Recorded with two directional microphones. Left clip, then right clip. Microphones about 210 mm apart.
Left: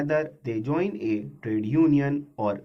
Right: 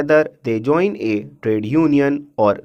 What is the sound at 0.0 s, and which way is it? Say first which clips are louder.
Speech: right 11 dB; 45° right (ahead or behind).